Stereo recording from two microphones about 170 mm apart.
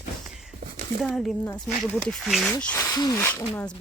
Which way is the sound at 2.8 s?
25° left (ahead or behind).